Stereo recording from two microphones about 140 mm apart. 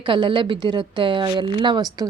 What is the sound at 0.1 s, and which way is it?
A woman's voice, 35° right (ahead or behind).